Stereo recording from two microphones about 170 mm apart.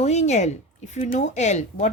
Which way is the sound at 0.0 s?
40° left (ahead or behind).